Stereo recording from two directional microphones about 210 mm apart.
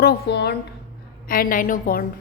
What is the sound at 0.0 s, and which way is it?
A woman's voice, 50° left (ahead or behind).